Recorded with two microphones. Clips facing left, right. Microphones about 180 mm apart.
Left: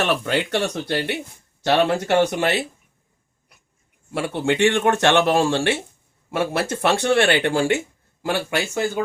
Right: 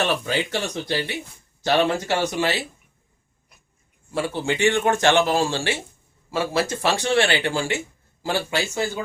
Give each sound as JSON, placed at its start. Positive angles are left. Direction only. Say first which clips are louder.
{"t": 0.1, "sound": "speech", "louder": "left 3 dB", "side_deg": 60}
{"t": 4.1, "sound": "speech", "louder": "left 2 dB", "side_deg": 65}